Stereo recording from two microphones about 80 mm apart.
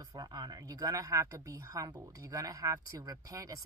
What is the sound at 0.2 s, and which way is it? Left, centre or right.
Speech, right.